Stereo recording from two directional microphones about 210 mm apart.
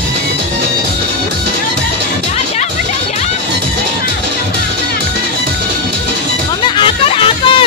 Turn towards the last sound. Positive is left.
turn(degrees=25)  # may be behind; listen again after turning